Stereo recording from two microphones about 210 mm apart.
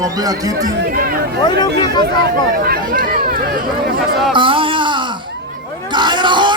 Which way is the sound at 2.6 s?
45° right (ahead or behind).